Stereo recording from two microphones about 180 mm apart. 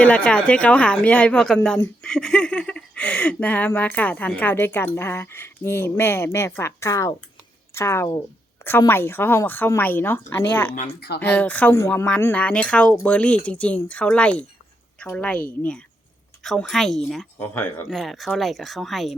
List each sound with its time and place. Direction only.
0.0 s speech: 5° left (ahead or behind)
17.5 s speech: 10° left (ahead or behind)
17.8 s speech: centre (ahead or behind)